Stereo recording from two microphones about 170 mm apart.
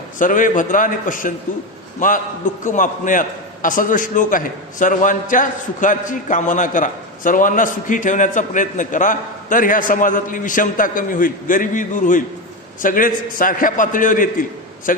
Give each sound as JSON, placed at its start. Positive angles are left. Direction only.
{"t": 0.2, "sound": "a man's voice", "side_deg": 50}